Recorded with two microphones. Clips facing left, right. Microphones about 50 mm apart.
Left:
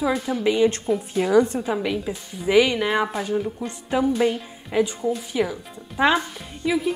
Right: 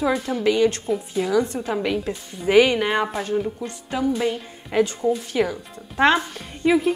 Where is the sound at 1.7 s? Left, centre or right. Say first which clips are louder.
Right 1 dB; centre.